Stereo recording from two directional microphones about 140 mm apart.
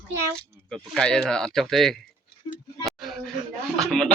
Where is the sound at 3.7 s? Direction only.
5° left (ahead or behind).